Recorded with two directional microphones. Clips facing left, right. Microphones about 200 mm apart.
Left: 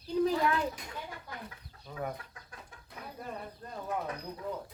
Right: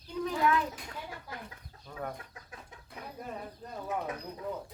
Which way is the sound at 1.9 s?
5° left (ahead or behind).